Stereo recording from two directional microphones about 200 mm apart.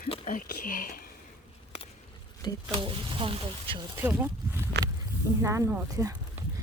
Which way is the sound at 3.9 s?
10° right (ahead or behind).